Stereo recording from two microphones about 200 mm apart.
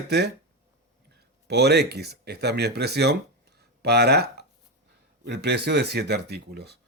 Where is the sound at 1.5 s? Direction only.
55° right (ahead or behind).